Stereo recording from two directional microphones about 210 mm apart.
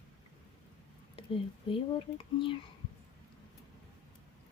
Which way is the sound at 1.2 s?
25° left (ahead or behind).